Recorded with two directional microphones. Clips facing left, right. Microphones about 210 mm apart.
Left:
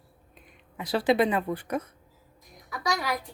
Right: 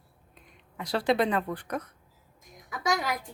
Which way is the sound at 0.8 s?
5° left (ahead or behind).